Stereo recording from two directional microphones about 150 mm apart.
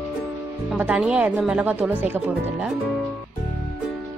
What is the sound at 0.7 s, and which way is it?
Speech, 10° right (ahead or behind).